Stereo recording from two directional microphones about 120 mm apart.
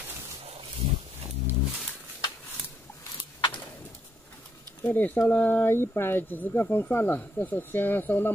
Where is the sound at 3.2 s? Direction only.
40° left (ahead or behind).